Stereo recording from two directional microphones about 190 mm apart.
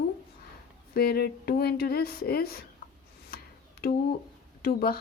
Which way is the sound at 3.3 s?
55° left (ahead or behind).